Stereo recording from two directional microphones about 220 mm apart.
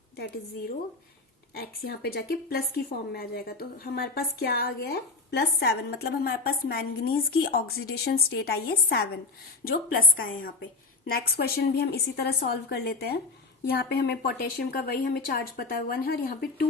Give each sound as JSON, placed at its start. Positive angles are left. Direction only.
{"t": 1.5, "sound": "a woman's voice", "side_deg": 45}